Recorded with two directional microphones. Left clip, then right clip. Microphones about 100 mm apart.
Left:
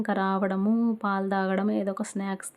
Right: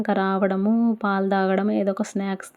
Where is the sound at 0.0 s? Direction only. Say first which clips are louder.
Right 5 dB; 25° right (ahead or behind).